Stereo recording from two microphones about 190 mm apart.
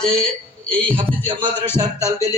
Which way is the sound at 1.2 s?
25° right (ahead or behind).